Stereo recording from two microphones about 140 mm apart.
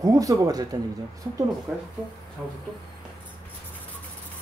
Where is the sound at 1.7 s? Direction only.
15° right (ahead or behind).